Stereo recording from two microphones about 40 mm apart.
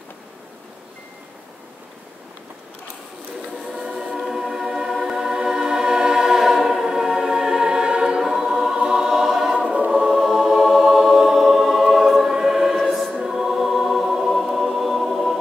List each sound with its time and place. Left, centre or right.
3.7 s music: centre
8.2 s choir: centre
10.0 s music: centre
12.8 s choir: centre